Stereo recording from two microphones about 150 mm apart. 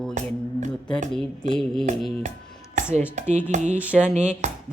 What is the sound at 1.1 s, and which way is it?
Speech, 5° left (ahead or behind).